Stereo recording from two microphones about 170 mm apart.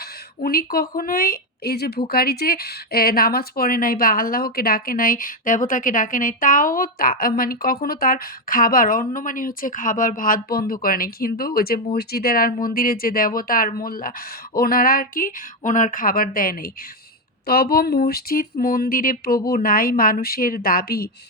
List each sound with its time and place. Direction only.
0.0 s speech: 60° left (ahead or behind)